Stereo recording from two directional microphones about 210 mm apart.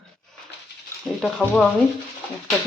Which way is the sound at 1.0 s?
Centre (ahead or behind).